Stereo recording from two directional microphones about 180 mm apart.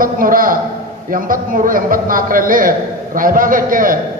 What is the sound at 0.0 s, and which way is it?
A man's voice, 50° right (ahead or behind).